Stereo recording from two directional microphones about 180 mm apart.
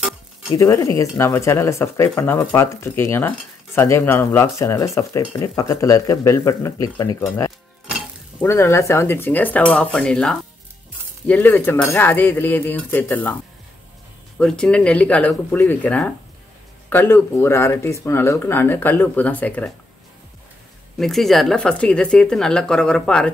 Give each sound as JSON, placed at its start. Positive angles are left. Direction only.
{"t": 0.6, "sound": "speech", "side_deg": 15}
{"t": 14.4, "sound": "speech", "side_deg": 5}
{"t": 21.0, "sound": "speech", "side_deg": 0}